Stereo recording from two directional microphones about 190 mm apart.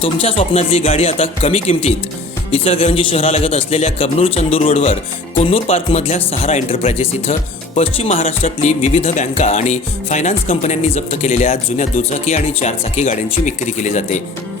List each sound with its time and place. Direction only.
0.0 s speech: 30° left (ahead or behind)